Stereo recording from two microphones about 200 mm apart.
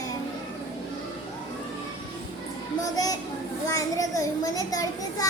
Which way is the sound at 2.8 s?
20° left (ahead or behind).